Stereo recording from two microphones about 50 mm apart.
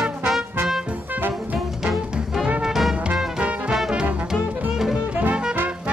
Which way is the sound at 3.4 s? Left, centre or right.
Right.